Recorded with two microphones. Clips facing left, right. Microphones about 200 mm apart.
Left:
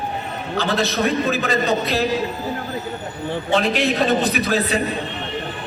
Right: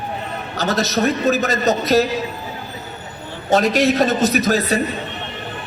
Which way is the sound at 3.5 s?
40° right (ahead or behind).